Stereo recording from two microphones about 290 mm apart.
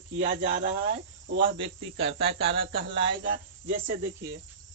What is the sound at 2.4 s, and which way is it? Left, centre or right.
Speech, right.